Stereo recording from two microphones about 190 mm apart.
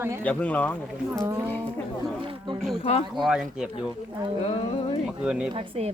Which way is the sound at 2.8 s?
35° left (ahead or behind).